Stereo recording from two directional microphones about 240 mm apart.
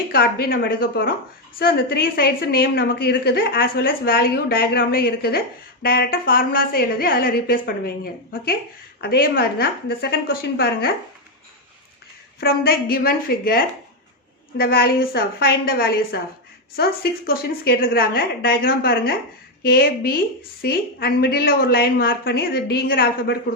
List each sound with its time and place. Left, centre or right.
0.1 s a woman's voice: left
12.4 s a woman's voice: left